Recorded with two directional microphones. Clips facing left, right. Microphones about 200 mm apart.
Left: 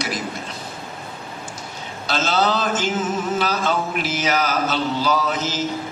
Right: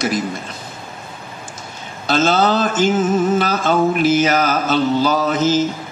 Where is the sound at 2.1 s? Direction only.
50° right (ahead or behind).